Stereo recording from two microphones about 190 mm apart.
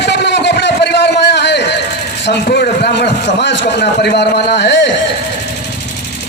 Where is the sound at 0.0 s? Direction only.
65° left (ahead or behind).